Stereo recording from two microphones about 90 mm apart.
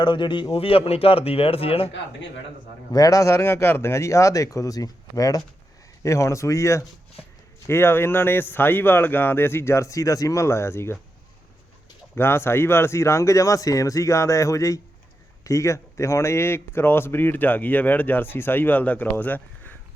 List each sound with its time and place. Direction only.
0.0 s speech: 60° left (ahead or behind); by 1.9 s 90° left
2.9 s speech: 40° left (ahead or behind)
12.1 s speech: 25° left (ahead or behind)